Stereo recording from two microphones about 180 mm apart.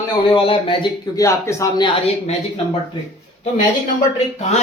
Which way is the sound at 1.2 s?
20° left (ahead or behind).